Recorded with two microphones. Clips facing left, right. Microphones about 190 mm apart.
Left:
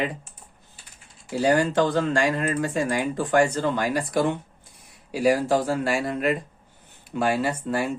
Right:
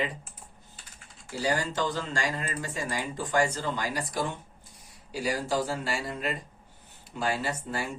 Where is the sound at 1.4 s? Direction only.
60° left (ahead or behind).